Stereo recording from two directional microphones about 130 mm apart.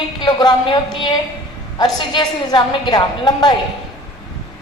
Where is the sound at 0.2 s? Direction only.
35° left (ahead or behind).